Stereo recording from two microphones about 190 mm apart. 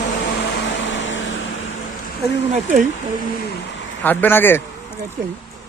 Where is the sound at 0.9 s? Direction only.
75° left (ahead or behind).